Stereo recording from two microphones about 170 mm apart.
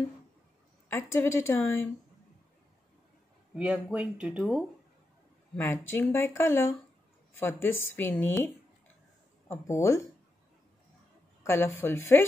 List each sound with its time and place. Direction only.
0.9 s a woman's voice: 15° left (ahead or behind)
3.5 s speech: 5° right (ahead or behind)
5.6 s a woman's voice: 15° left (ahead or behind)
9.5 s a woman's voice: 15° left (ahead or behind)
11.4 s a woman's voice: 15° left (ahead or behind)